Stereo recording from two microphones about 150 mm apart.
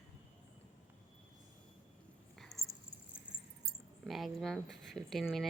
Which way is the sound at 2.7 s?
20° right (ahead or behind).